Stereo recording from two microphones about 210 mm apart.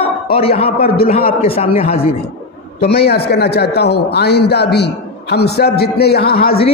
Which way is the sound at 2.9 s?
50° left (ahead or behind).